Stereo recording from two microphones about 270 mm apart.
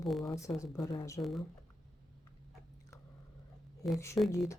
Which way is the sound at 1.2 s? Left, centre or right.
Centre.